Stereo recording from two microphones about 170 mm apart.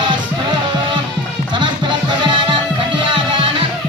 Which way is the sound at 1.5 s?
30° right (ahead or behind).